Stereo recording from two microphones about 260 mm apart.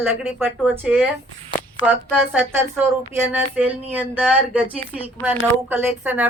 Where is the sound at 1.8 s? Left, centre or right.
Left.